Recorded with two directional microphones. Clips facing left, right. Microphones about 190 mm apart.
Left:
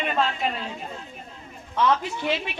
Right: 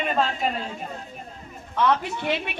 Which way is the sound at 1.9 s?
60° right (ahead or behind).